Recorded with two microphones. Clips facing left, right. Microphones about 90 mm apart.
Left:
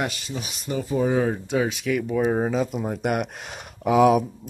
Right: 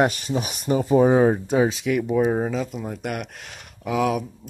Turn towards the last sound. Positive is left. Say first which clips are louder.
# left 6 dB
turn(degrees=20)  # may be behind; listen again after turning